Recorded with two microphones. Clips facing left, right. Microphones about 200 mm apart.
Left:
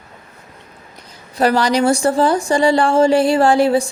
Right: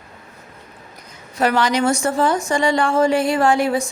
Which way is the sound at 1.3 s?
35° left (ahead or behind).